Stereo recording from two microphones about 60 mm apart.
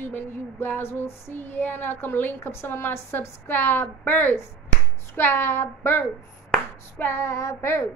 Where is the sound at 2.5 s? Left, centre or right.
Left.